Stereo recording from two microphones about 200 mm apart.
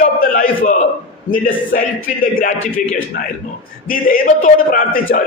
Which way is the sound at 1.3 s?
45° left (ahead or behind).